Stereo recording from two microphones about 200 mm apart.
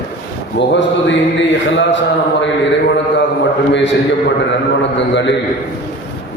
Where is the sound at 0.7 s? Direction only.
65° left (ahead or behind).